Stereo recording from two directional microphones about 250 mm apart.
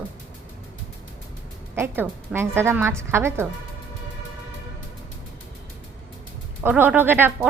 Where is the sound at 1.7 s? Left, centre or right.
Centre.